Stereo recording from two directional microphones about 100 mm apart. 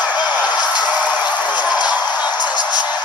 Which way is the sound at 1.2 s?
45° left (ahead or behind).